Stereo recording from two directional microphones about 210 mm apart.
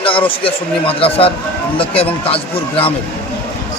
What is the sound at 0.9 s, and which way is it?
Speech, 25° left (ahead or behind).